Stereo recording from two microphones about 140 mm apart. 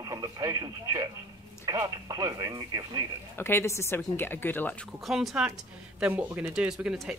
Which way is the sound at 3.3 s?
15° left (ahead or behind).